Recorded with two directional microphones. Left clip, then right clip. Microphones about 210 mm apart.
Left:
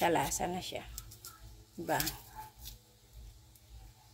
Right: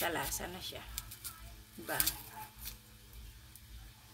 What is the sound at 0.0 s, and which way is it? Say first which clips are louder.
Speech: left 6 dB; 25° left (ahead or behind).